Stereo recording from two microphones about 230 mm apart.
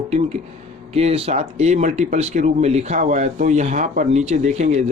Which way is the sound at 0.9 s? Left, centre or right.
Right.